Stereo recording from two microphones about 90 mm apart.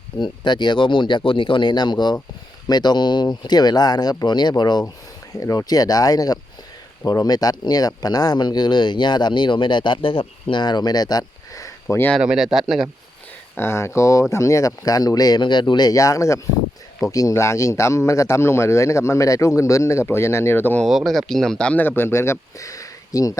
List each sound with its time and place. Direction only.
0.2 s speech: 55° left (ahead or behind)
5.3 s speech: 40° left (ahead or behind); by 10.6 s 85° left
10.6 s speech: 55° left (ahead or behind); by 12.0 s 35° left (ahead or behind)
12.2 s speech: 5° right (ahead or behind)
13.6 s speech: 30° left (ahead or behind); by 15.4 s 45° left (ahead or behind)
15.4 s speech: 60° left (ahead or behind); by 20.8 s 20° left (ahead or behind)
20.8 s speech: centre (ahead or behind)
21.8 s speech: 25° left (ahead or behind)